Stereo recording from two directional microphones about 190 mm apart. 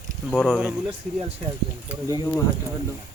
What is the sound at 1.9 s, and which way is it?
Speech, 20° right (ahead or behind).